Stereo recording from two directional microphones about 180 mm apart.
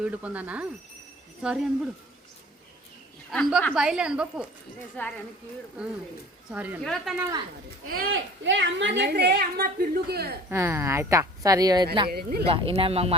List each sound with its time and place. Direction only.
0.0 s a woman's voice: 10° right (ahead or behind)
3.3 s a woman's voice: 5° left (ahead or behind)
5.0 s speech: 10° left (ahead or behind)
6.5 s a woman's voice: 10° right (ahead or behind)
7.2 s a woman's voice: 15° right (ahead or behind)
8.1 s a woman's voice: 90° right; by 10.3 s 60° right (ahead or behind)
10.5 s a woman's voice: 15° right (ahead or behind)
12.0 s speech: 60° right (ahead or behind)
12.5 s speech: 30° right (ahead or behind)